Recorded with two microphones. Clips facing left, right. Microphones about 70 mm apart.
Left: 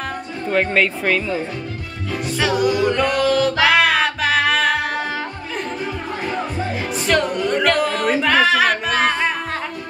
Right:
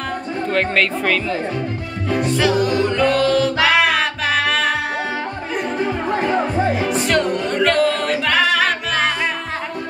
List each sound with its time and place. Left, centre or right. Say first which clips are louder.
0.5 s speech: left 1 dB; centre
2.0 s music: right 6 dB; right
2.3 s music: left 1 dB; centre
5.8 s music: right 6 dB; right
7.1 s music: left 4 dB; centre